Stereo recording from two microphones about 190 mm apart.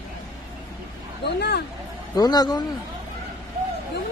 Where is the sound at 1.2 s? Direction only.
60° left (ahead or behind).